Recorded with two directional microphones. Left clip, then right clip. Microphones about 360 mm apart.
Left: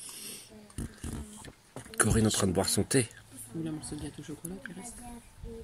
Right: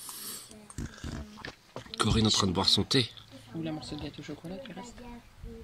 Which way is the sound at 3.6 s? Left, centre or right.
Centre.